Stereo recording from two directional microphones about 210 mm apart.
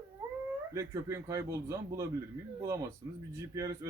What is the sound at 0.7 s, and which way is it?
Speech, 15° right (ahead or behind).